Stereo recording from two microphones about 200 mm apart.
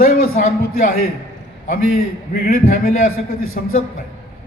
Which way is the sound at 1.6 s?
45° left (ahead or behind).